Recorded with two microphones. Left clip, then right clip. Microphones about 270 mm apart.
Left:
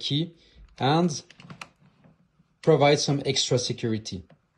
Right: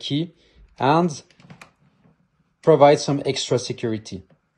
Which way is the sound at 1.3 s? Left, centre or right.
Centre.